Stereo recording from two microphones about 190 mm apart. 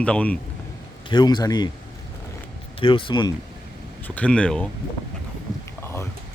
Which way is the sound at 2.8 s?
25° left (ahead or behind).